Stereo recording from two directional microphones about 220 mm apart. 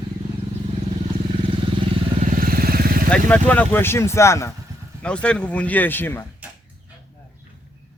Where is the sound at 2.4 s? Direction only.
40° right (ahead or behind).